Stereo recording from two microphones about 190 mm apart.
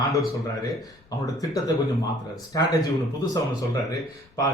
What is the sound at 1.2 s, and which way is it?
A man's voice, 20° left (ahead or behind).